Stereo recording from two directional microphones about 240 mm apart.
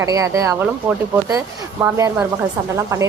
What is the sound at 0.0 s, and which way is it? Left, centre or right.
A woman's voice, centre.